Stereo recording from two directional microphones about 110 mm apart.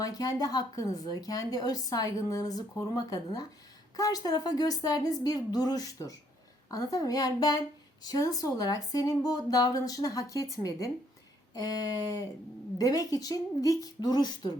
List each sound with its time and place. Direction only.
0.0 s speech: 35° left (ahead or behind)